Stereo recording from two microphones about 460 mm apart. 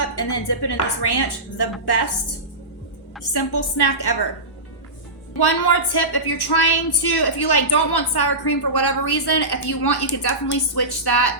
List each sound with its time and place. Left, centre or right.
0.2 s a woman's voice: left
3.3 s a woman's voice: left
5.4 s a woman's voice: left